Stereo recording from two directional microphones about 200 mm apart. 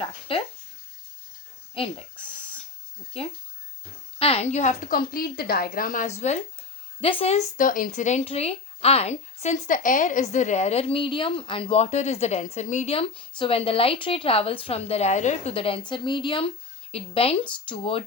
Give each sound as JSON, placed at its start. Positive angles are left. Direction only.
{"t": 0.0, "sound": "speech", "side_deg": 25}
{"t": 1.7, "sound": "a woman's voice", "side_deg": 25}
{"t": 6.1, "sound": "speech", "side_deg": 35}